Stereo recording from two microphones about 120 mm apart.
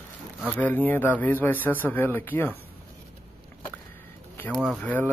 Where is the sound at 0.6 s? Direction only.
15° left (ahead or behind).